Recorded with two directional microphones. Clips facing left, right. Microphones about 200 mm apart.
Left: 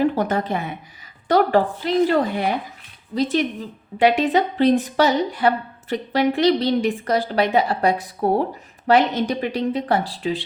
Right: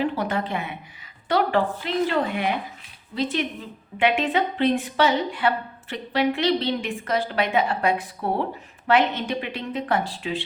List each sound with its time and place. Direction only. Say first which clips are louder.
0.0 s a woman's voice: left 5 dB; 45° left (ahead or behind)